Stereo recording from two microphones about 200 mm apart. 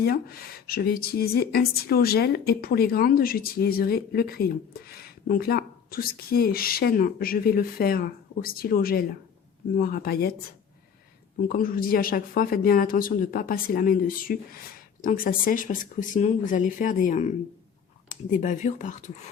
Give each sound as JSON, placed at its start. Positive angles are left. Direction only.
{"t": 0.0, "sound": "a woman's voice", "side_deg": 50}
{"t": 11.3, "sound": "a woman's voice", "side_deg": 45}
{"t": 18.3, "sound": "speech", "side_deg": 40}